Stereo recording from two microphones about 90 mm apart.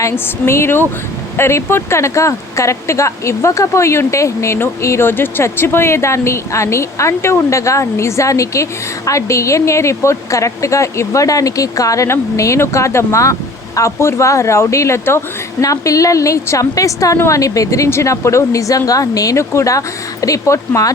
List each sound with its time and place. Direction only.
0.0 s speech: 30° left (ahead or behind)